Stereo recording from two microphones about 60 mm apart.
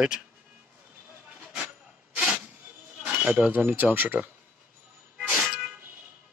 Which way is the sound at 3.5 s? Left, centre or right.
Right.